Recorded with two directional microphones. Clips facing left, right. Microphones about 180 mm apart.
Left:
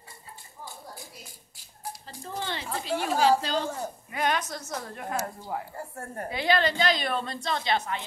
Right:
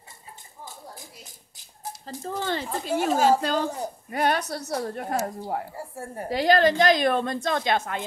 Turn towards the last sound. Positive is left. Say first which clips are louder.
# right 3 dB
turn(degrees=-50)  # may be behind; listen again after turning